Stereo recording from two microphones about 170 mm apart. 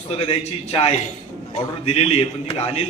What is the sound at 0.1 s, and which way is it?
A man's voice, 35° left (ahead or behind).